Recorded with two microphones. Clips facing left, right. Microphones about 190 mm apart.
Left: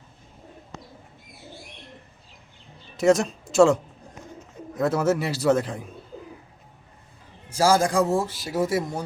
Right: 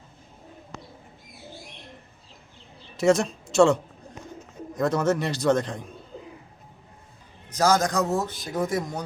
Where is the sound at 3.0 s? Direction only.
Centre (ahead or behind).